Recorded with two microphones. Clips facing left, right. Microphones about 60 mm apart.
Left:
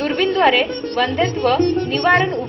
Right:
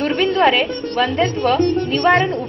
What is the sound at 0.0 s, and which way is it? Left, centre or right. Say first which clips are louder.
A woman's voice: even; centre.